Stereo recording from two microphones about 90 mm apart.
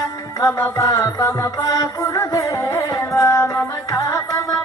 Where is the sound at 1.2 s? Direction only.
35° left (ahead or behind).